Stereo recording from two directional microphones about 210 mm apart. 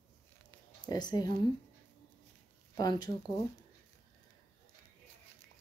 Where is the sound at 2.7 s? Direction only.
20° left (ahead or behind).